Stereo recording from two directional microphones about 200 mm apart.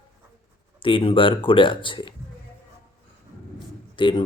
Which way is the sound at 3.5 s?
25° left (ahead or behind).